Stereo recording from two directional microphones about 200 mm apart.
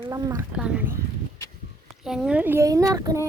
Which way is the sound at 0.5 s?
5° right (ahead or behind).